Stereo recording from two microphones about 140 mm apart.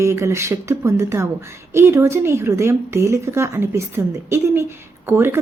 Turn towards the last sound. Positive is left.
turn(degrees=-15)  # may be behind; listen again after turning